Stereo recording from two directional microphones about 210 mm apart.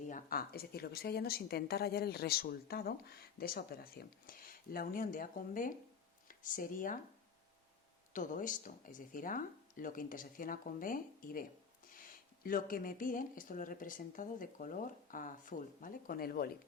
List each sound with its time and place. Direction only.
0.1 s a woman's voice: 45° left (ahead or behind)
8.1 s speech: 40° left (ahead or behind)